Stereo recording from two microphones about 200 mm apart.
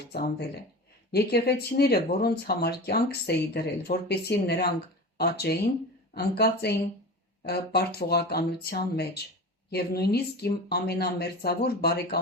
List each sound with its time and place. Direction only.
0.0 s speech: 55° left (ahead or behind)